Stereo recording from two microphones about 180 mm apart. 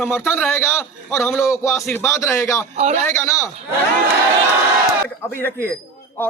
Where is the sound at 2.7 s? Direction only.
40° right (ahead or behind).